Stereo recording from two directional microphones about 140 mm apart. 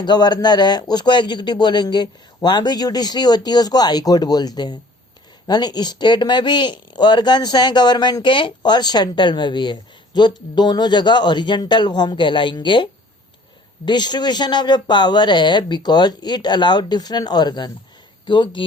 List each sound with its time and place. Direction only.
0.0 s speech: 30° left (ahead or behind)